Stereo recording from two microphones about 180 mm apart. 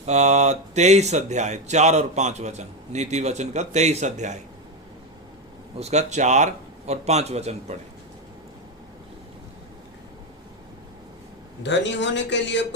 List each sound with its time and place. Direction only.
0.0 s speech: 40° right (ahead or behind)
5.7 s speech: 40° right (ahead or behind)
11.6 s a man's voice: 80° left